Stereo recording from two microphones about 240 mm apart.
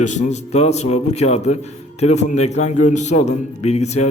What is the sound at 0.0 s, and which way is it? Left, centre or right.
A man's voice, left.